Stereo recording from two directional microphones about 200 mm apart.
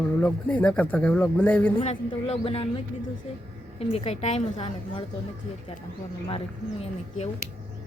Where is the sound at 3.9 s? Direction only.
30° left (ahead or behind).